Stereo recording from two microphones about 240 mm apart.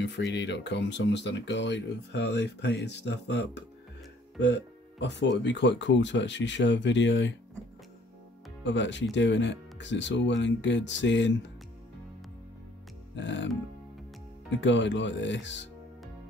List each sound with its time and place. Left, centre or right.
0.0 s speech: left
8.6 s speech: left
13.1 s speech: left
14.5 s speech: left